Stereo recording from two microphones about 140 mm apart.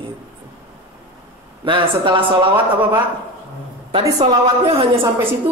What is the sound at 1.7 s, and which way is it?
Speech, 35° right (ahead or behind).